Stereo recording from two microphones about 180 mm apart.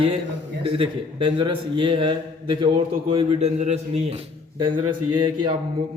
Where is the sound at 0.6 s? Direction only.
30° right (ahead or behind).